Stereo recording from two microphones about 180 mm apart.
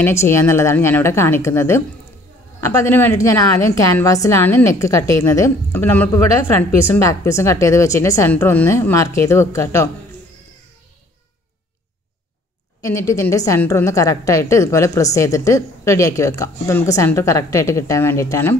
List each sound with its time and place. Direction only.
0.0 s a woman's voice: 15° left (ahead or behind)
12.8 s a woman's voice: 15° left (ahead or behind)